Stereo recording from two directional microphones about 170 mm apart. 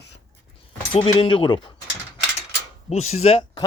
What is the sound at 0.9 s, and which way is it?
Speech, 35° left (ahead or behind).